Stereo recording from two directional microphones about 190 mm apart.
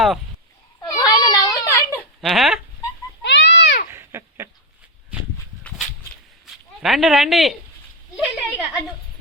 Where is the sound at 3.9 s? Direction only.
15° right (ahead or behind).